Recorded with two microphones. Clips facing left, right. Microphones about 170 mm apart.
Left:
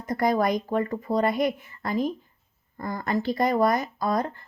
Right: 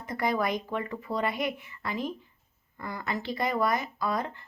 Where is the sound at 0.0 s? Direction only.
40° left (ahead or behind).